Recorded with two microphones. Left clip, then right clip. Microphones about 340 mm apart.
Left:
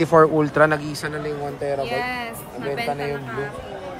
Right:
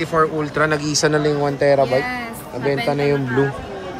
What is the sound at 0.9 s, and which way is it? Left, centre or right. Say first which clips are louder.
Speech: right 11 dB; centre.